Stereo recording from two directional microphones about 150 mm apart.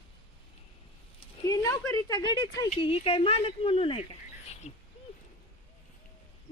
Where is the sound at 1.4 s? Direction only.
25° left (ahead or behind).